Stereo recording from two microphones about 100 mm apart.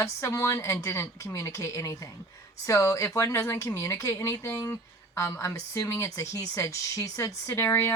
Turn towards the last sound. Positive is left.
turn(degrees=25)  # may be behind; listen again after turning